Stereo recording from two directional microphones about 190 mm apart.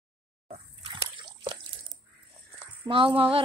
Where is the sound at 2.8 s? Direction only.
30° right (ahead or behind).